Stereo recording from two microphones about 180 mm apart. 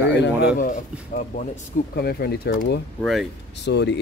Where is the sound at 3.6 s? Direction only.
70° left (ahead or behind).